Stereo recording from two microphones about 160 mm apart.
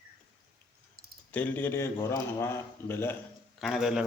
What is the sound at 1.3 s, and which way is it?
A man's voice, 10° left (ahead or behind).